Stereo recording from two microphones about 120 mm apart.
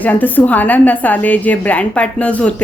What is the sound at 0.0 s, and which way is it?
Speech, 15° left (ahead or behind).